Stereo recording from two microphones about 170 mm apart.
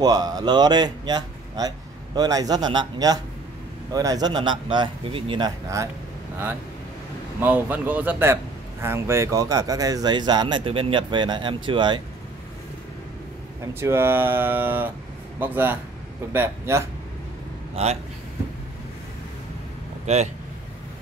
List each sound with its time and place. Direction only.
0.0 s speech: 25° right (ahead or behind)
7.3 s speech: 10° right (ahead or behind); by 12.0 s 25° right (ahead or behind)
13.7 s speech: 15° right (ahead or behind)
17.8 s speech: 35° right (ahead or behind)
20.1 s speech: 40° right (ahead or behind)